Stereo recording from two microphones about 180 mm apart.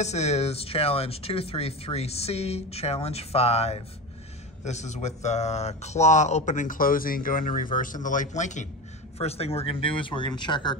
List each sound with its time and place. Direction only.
0.0 s speech: 40° left (ahead or behind)